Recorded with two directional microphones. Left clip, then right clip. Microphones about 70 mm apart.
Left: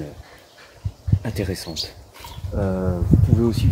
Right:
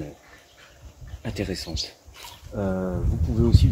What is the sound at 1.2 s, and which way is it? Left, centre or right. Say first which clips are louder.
Speech: left 2 dB; left.